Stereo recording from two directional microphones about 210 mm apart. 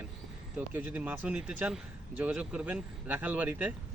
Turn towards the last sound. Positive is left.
turn(degrees=-5)  # may be behind; listen again after turning